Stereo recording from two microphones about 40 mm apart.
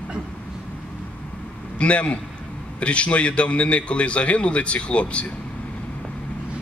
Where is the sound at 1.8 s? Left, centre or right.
Left.